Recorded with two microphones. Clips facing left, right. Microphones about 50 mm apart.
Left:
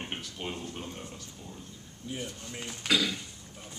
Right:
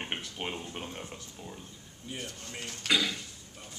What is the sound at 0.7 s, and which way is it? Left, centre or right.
Speech, centre.